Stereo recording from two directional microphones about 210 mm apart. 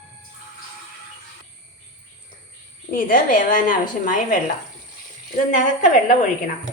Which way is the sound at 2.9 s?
40° left (ahead or behind).